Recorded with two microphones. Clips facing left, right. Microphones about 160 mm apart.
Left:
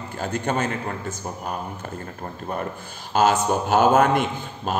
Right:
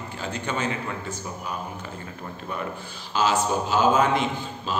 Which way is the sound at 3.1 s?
55° left (ahead or behind).